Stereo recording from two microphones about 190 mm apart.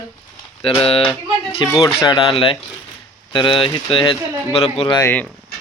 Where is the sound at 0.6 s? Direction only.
30° left (ahead or behind).